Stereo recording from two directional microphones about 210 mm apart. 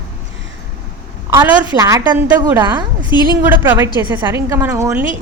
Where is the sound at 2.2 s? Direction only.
5° right (ahead or behind).